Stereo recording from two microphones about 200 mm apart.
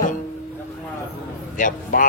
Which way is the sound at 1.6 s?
45° left (ahead or behind).